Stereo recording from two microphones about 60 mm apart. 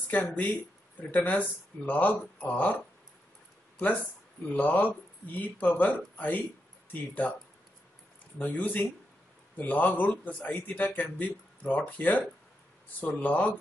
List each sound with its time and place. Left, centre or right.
0.1 s speech: left
4.6 s speech: left
8.4 s speech: left